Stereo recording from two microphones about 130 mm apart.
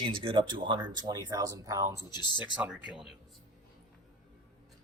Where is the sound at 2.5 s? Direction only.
10° right (ahead or behind).